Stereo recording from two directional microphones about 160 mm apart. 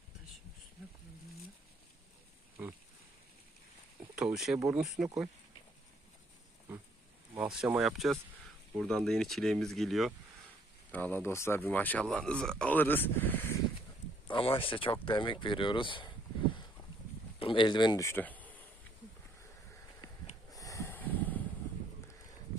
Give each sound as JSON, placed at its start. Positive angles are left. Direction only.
{"t": 4.1, "sound": "speech", "side_deg": -5}
{"t": 7.3, "sound": "speech", "side_deg": -5}
{"t": 10.9, "sound": "speech", "side_deg": 10}
{"t": 14.3, "sound": "speech", "side_deg": 35}
{"t": 20.5, "sound": "snort", "side_deg": 20}